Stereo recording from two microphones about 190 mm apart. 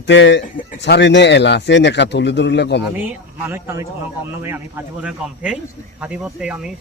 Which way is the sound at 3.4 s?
10° right (ahead or behind).